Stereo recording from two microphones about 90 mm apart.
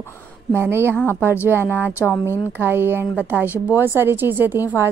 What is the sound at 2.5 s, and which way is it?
Speech, 25° right (ahead or behind).